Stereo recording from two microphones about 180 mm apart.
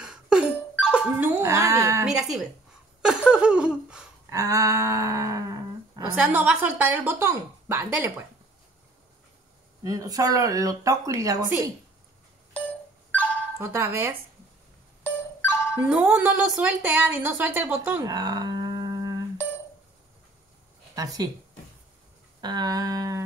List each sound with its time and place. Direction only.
0.0 s speech: 5° right (ahead or behind)
2.0 s a woman's voice: centre (ahead or behind)
3.0 s laughter: 5° right (ahead or behind)
4.3 s a sound: 15° right (ahead or behind)
6.2 s speech: 5° right (ahead or behind)
9.8 s speech: 20° right (ahead or behind)
13.6 s speech: 15° right (ahead or behind)
15.0 s music: 10° left (ahead or behind)
15.8 s speech: 5° right (ahead or behind)
18.0 s dog: 20° right (ahead or behind)
20.9 s speech: 20° right (ahead or behind)
22.4 s speech: 25° right (ahead or behind)